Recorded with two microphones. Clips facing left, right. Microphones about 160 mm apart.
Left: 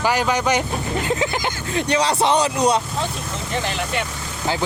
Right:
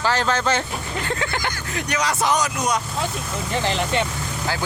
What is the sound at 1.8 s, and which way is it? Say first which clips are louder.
Speech: left 5 dB; 30° left (ahead or behind).